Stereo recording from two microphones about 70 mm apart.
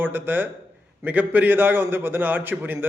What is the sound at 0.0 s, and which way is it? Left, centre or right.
A man's voice, right.